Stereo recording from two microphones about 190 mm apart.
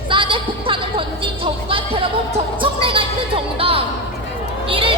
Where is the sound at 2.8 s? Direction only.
30° right (ahead or behind).